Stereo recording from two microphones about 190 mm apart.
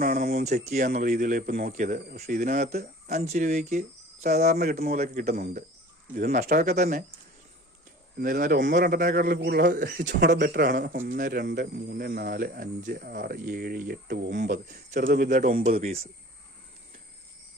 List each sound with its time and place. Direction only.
0.0 s speech: 50° right (ahead or behind)
4.5 s speech: 55° right (ahead or behind)
8.2 s speech: 50° right (ahead or behind)
15.6 s speech: 35° right (ahead or behind)